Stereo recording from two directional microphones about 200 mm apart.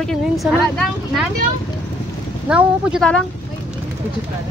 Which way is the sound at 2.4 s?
5° right (ahead or behind).